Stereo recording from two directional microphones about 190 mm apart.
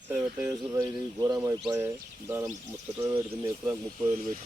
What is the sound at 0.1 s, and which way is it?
Speech, 15° right (ahead or behind).